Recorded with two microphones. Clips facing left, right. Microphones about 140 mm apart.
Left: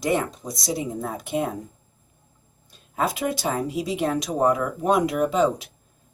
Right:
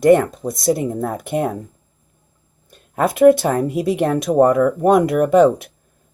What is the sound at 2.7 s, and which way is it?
Speech, 55° right (ahead or behind).